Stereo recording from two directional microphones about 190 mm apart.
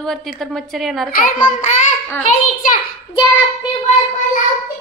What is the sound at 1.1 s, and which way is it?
A child's voice, 45° left (ahead or behind).